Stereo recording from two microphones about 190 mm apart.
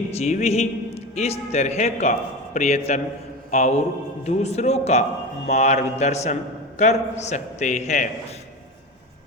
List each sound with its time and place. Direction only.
0.1 s a man's voice: 35° left (ahead or behind)